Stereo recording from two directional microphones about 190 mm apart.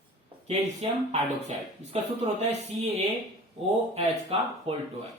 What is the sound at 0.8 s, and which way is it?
Speech, 30° right (ahead or behind).